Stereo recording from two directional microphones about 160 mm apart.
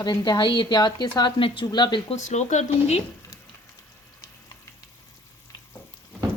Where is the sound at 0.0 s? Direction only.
25° left (ahead or behind).